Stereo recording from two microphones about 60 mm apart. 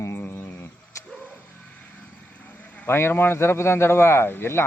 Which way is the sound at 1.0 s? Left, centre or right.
Left.